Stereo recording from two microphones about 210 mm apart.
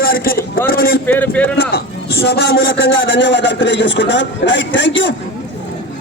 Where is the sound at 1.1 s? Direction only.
10° left (ahead or behind).